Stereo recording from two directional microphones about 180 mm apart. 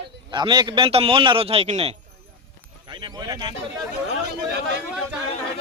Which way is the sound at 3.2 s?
25° right (ahead or behind).